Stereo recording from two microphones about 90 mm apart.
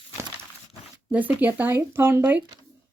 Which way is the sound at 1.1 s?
20° right (ahead or behind).